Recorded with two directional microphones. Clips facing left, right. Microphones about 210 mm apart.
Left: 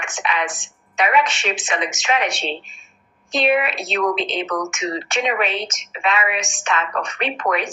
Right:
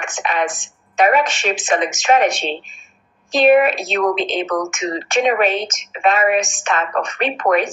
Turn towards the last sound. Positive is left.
turn(degrees=-45)  # may be behind; listen again after turning